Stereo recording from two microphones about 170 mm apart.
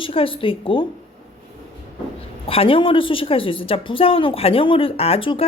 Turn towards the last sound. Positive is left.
turn(degrees=30)  # may be behind; listen again after turning